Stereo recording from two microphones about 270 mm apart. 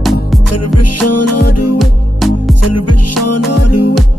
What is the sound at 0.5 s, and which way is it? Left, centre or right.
Music, left.